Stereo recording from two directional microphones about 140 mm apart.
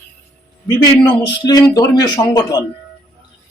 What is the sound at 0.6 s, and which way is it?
Speech, 30° left (ahead or behind).